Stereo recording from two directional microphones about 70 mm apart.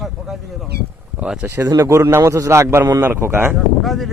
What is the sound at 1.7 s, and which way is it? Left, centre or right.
A man's voice, right.